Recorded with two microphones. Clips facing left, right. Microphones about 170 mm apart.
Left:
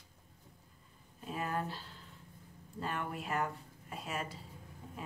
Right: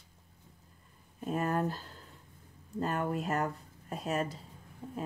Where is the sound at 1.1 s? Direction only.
45° right (ahead or behind).